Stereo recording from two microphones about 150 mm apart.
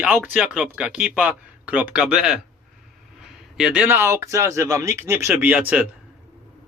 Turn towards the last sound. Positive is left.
turn(degrees=-10)  # may be behind; listen again after turning